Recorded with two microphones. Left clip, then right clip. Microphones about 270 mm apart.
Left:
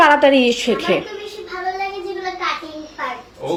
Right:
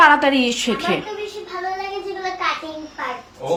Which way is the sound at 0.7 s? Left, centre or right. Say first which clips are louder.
Left 3 dB; right.